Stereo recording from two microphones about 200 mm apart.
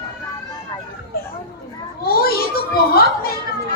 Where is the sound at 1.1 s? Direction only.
50° left (ahead or behind).